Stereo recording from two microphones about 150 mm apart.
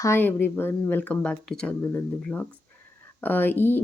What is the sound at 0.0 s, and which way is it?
Speech, 15° left (ahead or behind).